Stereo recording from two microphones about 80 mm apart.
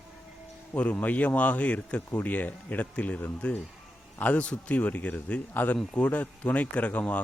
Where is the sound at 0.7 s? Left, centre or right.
Centre.